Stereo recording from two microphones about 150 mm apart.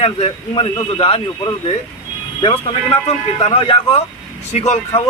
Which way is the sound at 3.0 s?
35° left (ahead or behind).